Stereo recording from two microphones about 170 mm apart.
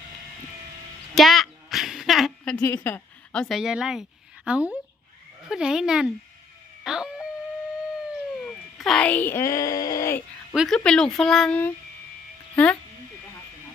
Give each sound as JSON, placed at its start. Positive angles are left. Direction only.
{"t": 1.1, "sound": "a sound", "side_deg": 0}
{"t": 3.4, "sound": "a woman's voice", "side_deg": -5}
{"t": 6.8, "sound": "howl", "side_deg": -5}
{"t": 8.4, "sound": "speech", "side_deg": 0}
{"t": 10.5, "sound": "speech", "side_deg": 0}